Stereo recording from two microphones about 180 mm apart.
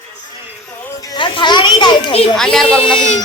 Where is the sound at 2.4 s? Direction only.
5° left (ahead or behind).